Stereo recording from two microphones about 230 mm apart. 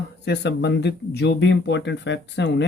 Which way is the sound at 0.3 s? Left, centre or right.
Left.